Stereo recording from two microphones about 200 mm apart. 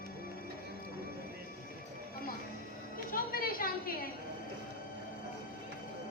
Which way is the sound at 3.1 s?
45° left (ahead or behind).